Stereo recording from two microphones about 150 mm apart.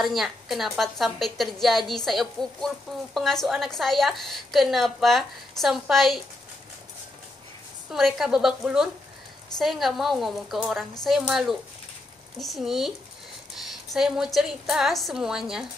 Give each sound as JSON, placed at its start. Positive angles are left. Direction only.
{"t": 0.0, "sound": "a woman's voice", "side_deg": 0}
{"t": 7.9, "sound": "a woman's voice", "side_deg": 0}
{"t": 13.9, "sound": "a woman's voice", "side_deg": -5}